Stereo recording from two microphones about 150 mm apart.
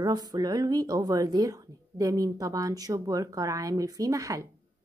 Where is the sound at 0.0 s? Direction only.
25° right (ahead or behind).